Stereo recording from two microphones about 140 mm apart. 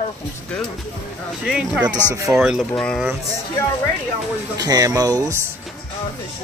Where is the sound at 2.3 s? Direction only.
5° right (ahead or behind).